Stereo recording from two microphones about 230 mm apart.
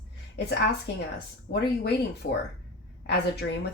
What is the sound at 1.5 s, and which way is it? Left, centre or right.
Speech, left.